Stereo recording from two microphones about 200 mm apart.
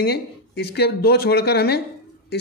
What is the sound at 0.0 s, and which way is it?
Speech, 50° left (ahead or behind).